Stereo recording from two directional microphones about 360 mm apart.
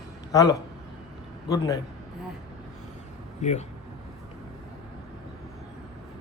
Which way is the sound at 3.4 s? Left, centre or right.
Centre.